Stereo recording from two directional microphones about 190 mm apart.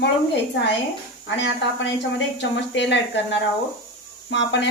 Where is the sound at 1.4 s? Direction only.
70° left (ahead or behind).